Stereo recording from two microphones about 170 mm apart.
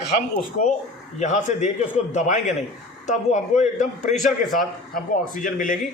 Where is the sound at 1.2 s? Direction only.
45° left (ahead or behind).